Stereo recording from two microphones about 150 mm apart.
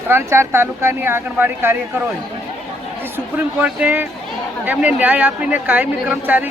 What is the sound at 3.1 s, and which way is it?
Speech, 10° right (ahead or behind).